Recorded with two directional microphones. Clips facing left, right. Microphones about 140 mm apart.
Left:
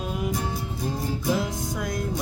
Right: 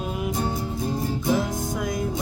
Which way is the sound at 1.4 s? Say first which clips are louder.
Right 2 dB; centre (ahead or behind).